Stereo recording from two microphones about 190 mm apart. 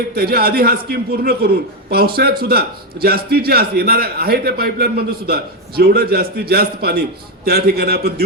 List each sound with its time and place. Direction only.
0.2 s a man's voice: 55° right (ahead or behind)